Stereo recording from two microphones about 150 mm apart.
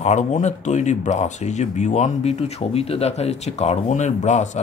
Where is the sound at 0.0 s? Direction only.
50° left (ahead or behind).